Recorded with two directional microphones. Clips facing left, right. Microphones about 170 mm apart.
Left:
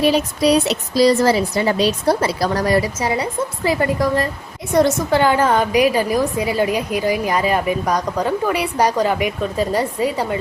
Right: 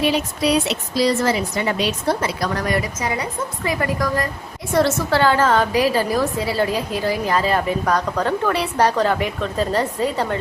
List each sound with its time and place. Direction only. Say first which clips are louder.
0.0 s a woman's voice: left 4 dB; 40° left (ahead or behind); by 10.3 s 10° left (ahead or behind)